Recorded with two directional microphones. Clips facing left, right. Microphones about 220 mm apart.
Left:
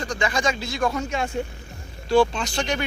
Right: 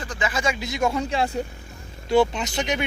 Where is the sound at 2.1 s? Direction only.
20° right (ahead or behind).